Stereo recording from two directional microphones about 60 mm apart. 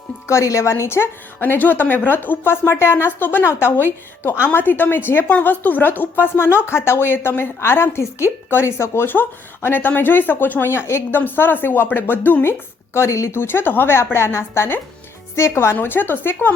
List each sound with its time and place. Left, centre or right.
0.3 s speech: left
11.2 s speech: left
12.4 s speech: left
13.4 s speech: left